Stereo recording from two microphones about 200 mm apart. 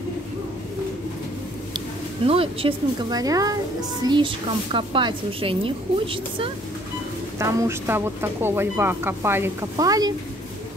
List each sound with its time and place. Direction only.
2.2 s a woman's voice: 30° right (ahead or behind)
7.3 s speech: 15° right (ahead or behind)